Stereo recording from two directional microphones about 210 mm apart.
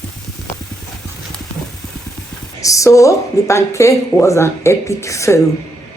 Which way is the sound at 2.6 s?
15° left (ahead or behind).